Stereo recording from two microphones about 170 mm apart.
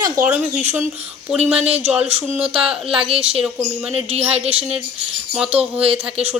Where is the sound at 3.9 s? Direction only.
35° right (ahead or behind).